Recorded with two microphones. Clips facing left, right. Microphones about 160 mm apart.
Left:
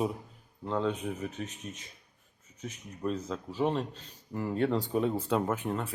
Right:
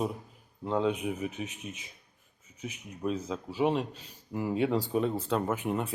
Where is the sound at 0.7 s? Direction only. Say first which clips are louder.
Right 2 dB; 10° right (ahead or behind).